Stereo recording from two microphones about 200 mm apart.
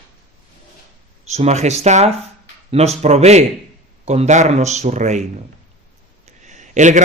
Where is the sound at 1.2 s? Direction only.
35° right (ahead or behind).